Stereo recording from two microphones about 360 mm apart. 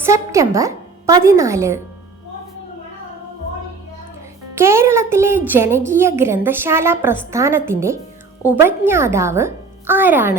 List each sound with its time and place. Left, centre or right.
0.0 s a woman's voice: centre
4.5 s a woman's voice: centre